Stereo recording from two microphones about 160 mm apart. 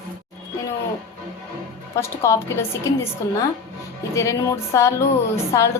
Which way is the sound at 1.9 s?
15° left (ahead or behind).